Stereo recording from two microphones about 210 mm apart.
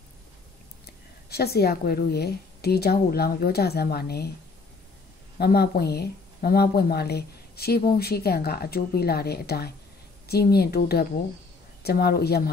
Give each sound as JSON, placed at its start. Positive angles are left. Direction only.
{"t": 1.3, "sound": "speech", "side_deg": 50}
{"t": 5.4, "sound": "speech", "side_deg": 50}